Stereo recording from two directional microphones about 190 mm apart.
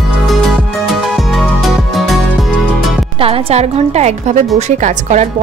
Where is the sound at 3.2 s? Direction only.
30° right (ahead or behind).